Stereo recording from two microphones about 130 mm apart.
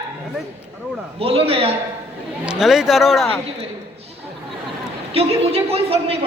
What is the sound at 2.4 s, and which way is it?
Speech, 5° right (ahead or behind).